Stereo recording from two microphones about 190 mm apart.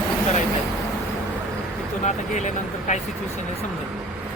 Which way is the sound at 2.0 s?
40° left (ahead or behind).